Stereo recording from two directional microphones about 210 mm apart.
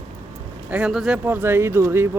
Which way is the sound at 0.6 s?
5° right (ahead or behind).